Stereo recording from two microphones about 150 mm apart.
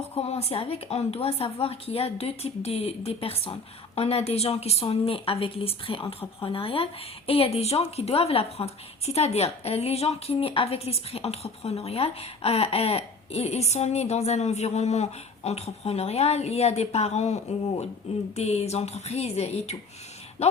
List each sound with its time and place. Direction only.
0.1 s a woman's voice: 45° left (ahead or behind)